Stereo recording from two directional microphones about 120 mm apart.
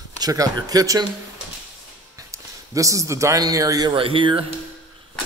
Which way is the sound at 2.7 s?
25° right (ahead or behind).